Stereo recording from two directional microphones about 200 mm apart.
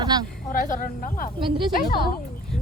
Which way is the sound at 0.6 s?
40° left (ahead or behind).